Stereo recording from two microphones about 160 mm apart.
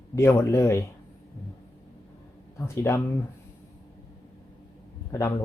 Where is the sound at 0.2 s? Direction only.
15° left (ahead or behind).